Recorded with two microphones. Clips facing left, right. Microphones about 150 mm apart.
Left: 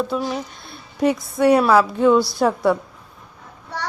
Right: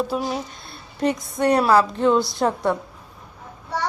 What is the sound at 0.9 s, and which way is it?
A woman's voice, 5° left (ahead or behind).